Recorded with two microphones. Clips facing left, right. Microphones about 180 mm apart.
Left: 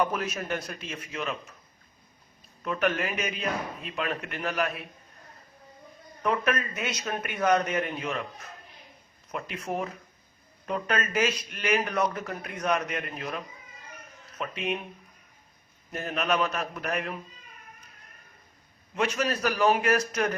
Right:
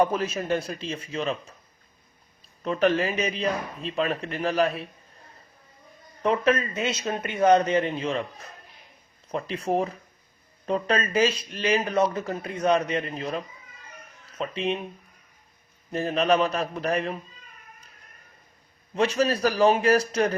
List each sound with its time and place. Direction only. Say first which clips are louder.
0.0 s speech: right 5 dB; 30° right (ahead or behind)
2.6 s speech: right 5 dB; 30° right (ahead or behind)
6.2 s speech: right 5 dB; 30° right (ahead or behind)
15.9 s speech: right 6 dB; 30° right (ahead or behind)
18.9 s speech: right 5 dB; 30° right (ahead or behind)